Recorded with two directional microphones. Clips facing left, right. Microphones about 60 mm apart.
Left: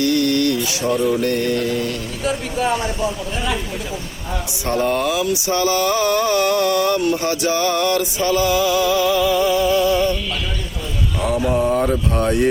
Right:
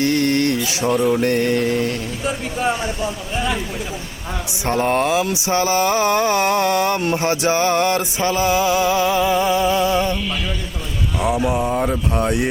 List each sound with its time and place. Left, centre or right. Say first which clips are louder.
0.0 s music: even; right
0.9 s mantra: right 2 dB; right
4.6 s mantra: right 1 dB; right
11.2 s a sound: left 1 dB; centre